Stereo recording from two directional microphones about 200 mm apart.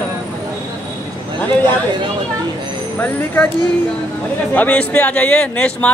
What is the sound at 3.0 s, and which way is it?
Speech, 10° left (ahead or behind).